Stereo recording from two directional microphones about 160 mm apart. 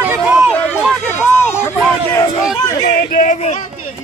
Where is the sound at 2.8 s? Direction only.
50° left (ahead or behind).